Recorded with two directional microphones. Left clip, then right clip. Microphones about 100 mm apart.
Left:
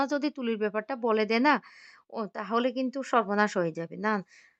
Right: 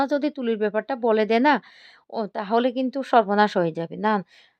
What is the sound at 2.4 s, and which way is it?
A woman's voice, 35° right (ahead or behind).